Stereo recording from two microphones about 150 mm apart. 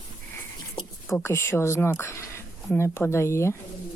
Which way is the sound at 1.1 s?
20° left (ahead or behind).